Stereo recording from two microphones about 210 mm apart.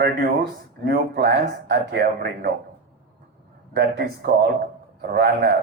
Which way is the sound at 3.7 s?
45° right (ahead or behind).